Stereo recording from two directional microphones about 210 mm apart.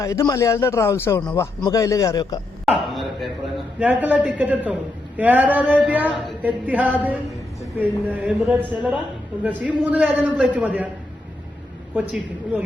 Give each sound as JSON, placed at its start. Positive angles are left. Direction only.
{"t": 0.0, "sound": "speech", "side_deg": 15}
{"t": 2.6, "sound": "a man's voice", "side_deg": 0}
{"t": 11.9, "sound": "a man's voice", "side_deg": -5}